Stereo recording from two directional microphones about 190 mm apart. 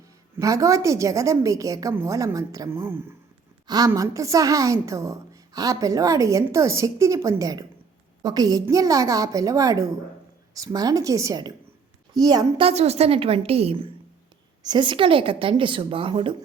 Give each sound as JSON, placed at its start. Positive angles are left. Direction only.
{"t": 0.3, "sound": "a woman's voice", "side_deg": -15}